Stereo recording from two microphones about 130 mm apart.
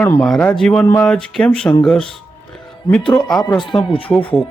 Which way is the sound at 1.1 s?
5° left (ahead or behind).